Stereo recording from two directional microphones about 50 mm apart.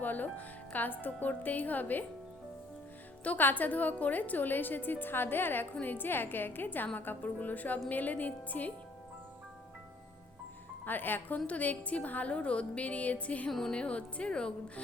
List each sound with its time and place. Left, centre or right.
0.0 s a woman's voice: left
3.2 s a woman's voice: left
10.8 s a woman's voice: left; by 14.5 s centre